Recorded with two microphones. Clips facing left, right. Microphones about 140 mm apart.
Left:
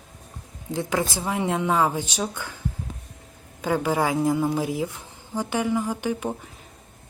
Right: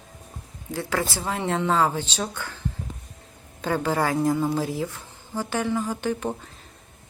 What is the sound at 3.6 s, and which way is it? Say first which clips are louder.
A woman's voice: left 1 dB; 10° left (ahead or behind).